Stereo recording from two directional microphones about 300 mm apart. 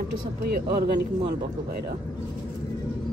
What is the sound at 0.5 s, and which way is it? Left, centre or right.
Speech, right.